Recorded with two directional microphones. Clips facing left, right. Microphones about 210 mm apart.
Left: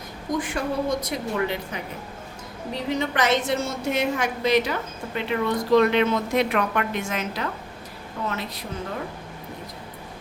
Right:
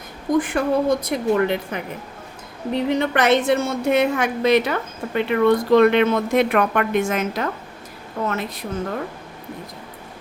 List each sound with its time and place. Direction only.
0.3 s a woman's voice: 55° right (ahead or behind)